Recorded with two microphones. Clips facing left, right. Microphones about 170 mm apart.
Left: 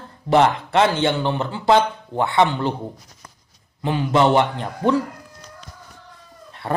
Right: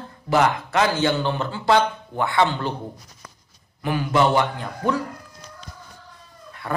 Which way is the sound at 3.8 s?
25° left (ahead or behind).